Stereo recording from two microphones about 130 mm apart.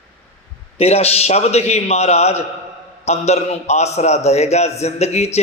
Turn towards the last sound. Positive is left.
turn(degrees=55)  # may be behind; listen again after turning